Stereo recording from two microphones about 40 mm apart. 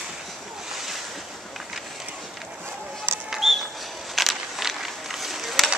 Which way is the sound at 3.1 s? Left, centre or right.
Right.